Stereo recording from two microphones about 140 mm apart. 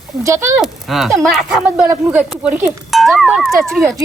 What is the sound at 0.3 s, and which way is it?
Speech, 20° right (ahead or behind).